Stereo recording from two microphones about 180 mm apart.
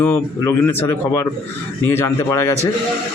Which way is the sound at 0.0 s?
10° left (ahead or behind).